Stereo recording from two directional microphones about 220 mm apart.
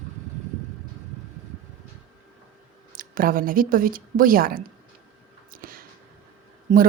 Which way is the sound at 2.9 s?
40° right (ahead or behind).